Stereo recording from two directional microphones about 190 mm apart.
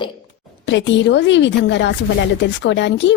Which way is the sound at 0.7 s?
70° left (ahead or behind).